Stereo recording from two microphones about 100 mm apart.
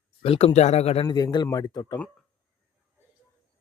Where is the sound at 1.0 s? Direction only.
40° left (ahead or behind).